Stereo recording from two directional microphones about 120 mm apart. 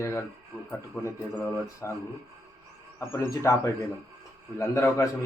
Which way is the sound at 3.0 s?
20° left (ahead or behind).